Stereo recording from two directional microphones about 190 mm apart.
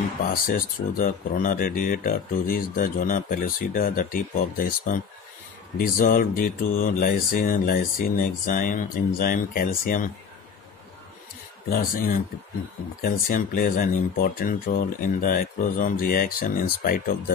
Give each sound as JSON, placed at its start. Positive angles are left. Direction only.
{"t": 0.3, "sound": "speech", "side_deg": 50}
{"t": 11.7, "sound": "speech", "side_deg": 45}